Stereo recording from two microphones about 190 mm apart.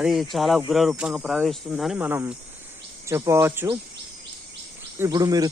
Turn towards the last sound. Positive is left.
turn(degrees=-20)  # may be behind; listen again after turning